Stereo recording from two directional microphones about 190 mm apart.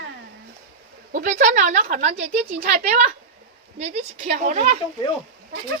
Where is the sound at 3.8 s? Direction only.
35° right (ahead or behind).